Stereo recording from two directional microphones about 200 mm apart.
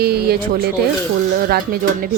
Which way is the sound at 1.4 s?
50° right (ahead or behind).